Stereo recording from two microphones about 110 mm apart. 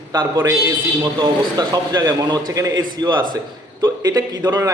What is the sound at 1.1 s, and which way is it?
A man's voice, 40° right (ahead or behind).